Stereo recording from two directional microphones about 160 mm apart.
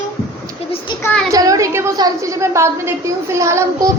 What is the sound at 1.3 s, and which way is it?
A woman's voice, 20° right (ahead or behind).